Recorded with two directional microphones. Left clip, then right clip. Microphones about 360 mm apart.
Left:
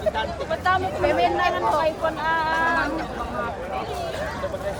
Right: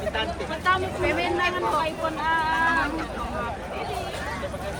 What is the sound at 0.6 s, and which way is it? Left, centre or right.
Speech, left.